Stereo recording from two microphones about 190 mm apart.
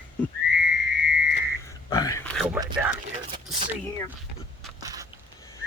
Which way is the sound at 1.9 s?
15° left (ahead or behind).